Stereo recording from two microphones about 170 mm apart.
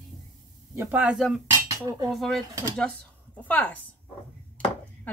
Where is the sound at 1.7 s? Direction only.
20° right (ahead or behind).